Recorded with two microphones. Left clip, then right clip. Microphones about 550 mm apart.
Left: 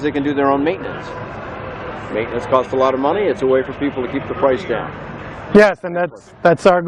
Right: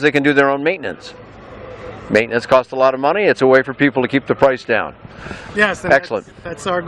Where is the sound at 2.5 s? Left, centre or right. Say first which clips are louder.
Right 1 dB; right.